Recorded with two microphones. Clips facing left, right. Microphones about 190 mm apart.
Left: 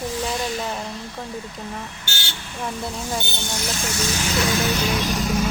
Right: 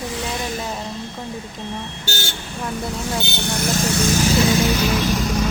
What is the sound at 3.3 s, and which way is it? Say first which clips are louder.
Speech: right 6 dB; 60° right (ahead or behind).